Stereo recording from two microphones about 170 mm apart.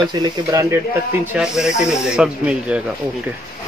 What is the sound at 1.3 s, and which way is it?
Speech, 5° right (ahead or behind).